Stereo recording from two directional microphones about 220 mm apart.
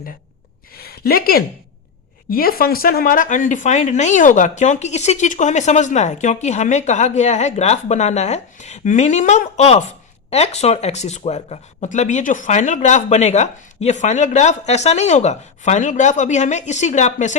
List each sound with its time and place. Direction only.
0.8 s a woman's voice: 45° left (ahead or behind)